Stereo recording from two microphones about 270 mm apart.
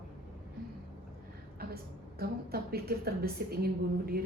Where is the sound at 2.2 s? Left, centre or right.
Right.